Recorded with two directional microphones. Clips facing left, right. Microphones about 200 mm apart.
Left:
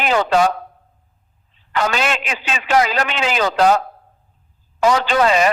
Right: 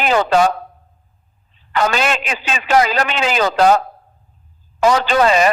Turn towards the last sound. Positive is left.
turn(degrees=-40)  # may be behind; listen again after turning